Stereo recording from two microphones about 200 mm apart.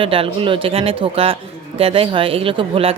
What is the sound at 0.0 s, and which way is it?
Speech, 25° right (ahead or behind).